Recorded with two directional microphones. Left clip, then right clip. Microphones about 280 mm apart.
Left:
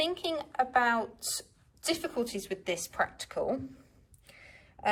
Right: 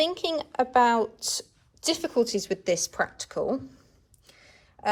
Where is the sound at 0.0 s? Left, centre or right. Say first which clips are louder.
Right 5 dB; centre.